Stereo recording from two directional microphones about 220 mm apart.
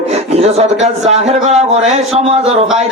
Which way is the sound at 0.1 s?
30° right (ahead or behind).